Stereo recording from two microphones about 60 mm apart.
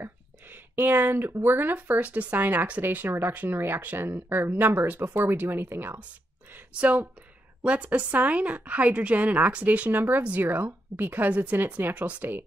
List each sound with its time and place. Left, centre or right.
0.0 s a sound: right
1.4 s a woman's voice: right
3.1 s speech: right
6.7 s a woman's voice: right